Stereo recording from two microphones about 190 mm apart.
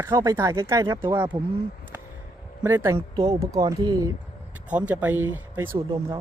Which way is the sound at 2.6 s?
10° right (ahead or behind).